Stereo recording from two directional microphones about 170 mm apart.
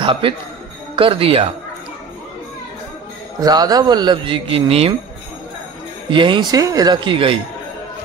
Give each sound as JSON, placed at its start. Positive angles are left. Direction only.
{"t": 0.0, "sound": "speech", "side_deg": -30}
{"t": 3.3, "sound": "a man's voice", "side_deg": -20}
{"t": 6.0, "sound": "a man's voice", "side_deg": -30}